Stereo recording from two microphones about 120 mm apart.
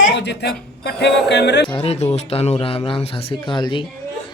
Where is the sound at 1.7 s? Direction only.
55° left (ahead or behind).